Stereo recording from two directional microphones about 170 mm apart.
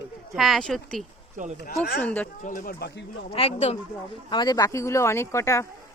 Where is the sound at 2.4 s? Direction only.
55° left (ahead or behind); by 3.0 s 70° left (ahead or behind).